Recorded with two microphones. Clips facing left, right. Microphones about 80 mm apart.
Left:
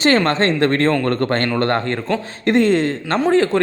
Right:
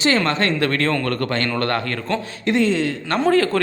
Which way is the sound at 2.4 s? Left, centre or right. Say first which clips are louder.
Left 4 dB; left.